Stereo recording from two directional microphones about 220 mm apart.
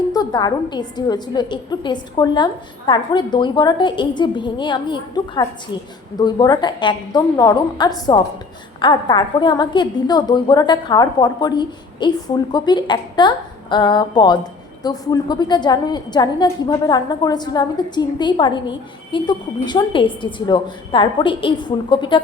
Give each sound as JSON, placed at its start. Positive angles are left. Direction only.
{"t": 0.1, "sound": "a woman's voice", "side_deg": 15}